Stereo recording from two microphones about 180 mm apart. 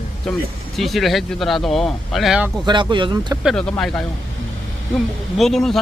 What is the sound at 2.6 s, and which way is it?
Speech, 25° right (ahead or behind).